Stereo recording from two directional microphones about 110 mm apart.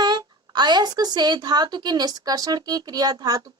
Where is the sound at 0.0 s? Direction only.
40° right (ahead or behind).